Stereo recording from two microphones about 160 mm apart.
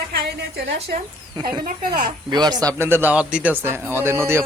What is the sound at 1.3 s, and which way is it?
A man's voice, 25° right (ahead or behind).